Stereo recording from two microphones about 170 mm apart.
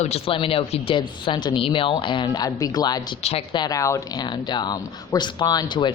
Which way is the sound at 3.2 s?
35° left (ahead or behind).